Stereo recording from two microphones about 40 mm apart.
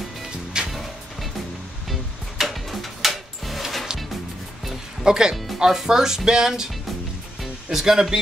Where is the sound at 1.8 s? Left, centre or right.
Centre.